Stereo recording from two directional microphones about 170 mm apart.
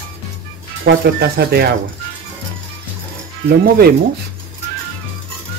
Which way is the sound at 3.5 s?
65° right (ahead or behind).